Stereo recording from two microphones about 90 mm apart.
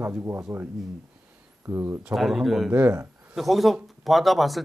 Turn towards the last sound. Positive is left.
turn(degrees=0)  # may be behind; listen again after turning